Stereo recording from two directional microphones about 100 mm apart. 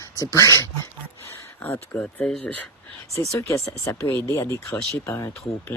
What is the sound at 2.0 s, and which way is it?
Speech, 10° left (ahead or behind).